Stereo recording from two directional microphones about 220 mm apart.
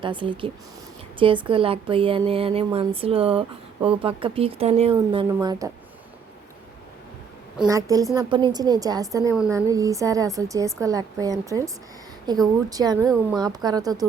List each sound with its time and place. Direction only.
0.0 s a woman's voice: 20° right (ahead or behind)
7.7 s a woman's voice: 15° right (ahead or behind)